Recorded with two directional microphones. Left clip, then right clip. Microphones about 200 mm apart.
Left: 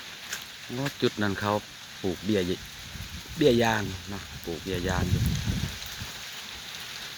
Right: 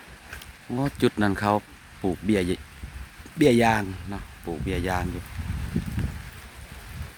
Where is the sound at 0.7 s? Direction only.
35° right (ahead or behind).